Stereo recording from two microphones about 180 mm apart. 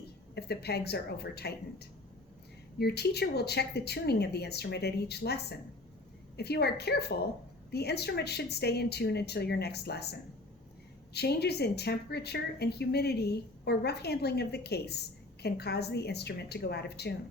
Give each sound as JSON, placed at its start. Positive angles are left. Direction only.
{"t": 0.3, "sound": "a woman's voice", "side_deg": 65}